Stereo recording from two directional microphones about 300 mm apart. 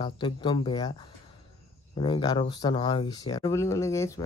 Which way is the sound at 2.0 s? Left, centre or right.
Centre.